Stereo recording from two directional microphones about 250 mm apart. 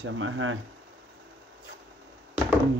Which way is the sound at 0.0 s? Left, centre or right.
Right.